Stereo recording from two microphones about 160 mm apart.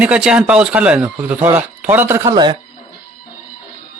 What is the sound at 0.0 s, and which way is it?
Speech, 5° right (ahead or behind).